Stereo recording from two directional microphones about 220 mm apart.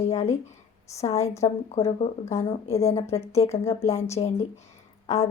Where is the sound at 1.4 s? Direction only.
30° left (ahead or behind).